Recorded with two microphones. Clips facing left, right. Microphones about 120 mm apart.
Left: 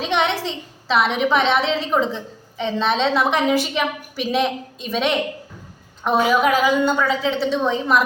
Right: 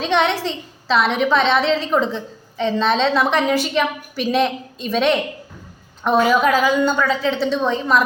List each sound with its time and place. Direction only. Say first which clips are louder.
0.0 s a woman's voice: right 2 dB; 15° left (ahead or behind)